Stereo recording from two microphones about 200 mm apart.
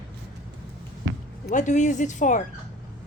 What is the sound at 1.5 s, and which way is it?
Speech, 40° left (ahead or behind).